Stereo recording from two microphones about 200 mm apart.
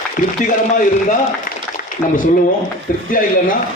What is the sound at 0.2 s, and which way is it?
Speech, 40° left (ahead or behind).